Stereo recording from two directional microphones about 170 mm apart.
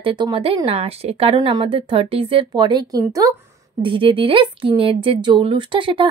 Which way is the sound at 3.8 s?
30° right (ahead or behind).